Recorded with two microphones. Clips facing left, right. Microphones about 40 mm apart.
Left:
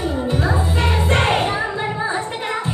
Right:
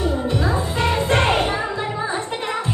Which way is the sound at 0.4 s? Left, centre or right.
Centre.